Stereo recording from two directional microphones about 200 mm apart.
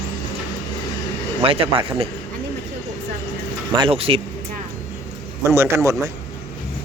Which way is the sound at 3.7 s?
30° right (ahead or behind).